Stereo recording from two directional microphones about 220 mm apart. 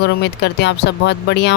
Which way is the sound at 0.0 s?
50° left (ahead or behind).